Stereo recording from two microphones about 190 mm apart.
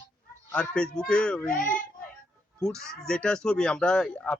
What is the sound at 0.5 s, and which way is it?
Speech, 5° left (ahead or behind).